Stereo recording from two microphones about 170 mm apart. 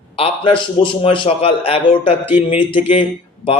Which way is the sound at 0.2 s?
30° left (ahead or behind).